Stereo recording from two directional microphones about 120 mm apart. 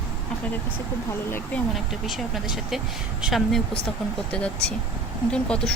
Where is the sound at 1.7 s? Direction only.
5° right (ahead or behind).